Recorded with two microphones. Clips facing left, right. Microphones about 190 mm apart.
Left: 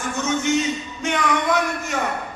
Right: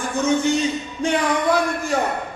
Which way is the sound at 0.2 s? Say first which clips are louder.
Right 3 dB; 35° right (ahead or behind).